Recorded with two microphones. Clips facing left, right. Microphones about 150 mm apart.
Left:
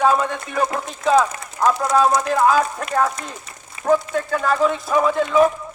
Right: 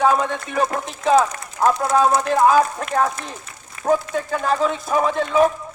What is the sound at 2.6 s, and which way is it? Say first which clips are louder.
Speech: right 1 dB; 30° right (ahead or behind).